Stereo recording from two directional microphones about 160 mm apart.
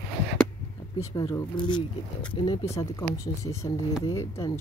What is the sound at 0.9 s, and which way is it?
Speech, 20° left (ahead or behind).